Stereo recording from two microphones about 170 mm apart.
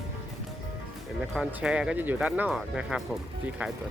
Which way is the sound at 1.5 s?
10° right (ahead or behind).